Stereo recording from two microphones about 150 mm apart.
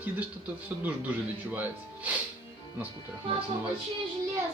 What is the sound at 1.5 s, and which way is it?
Speech, 10° right (ahead or behind).